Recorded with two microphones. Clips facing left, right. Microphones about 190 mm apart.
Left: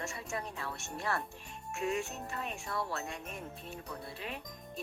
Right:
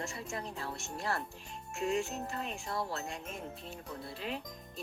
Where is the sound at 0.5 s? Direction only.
25° right (ahead or behind).